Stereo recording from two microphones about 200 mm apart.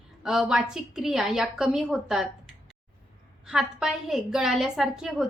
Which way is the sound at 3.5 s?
Centre (ahead or behind).